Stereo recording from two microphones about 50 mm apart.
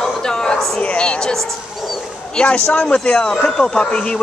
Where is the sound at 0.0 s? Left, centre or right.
Centre.